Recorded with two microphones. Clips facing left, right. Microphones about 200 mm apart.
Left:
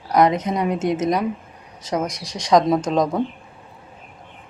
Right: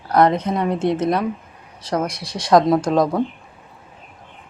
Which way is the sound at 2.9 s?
5° right (ahead or behind).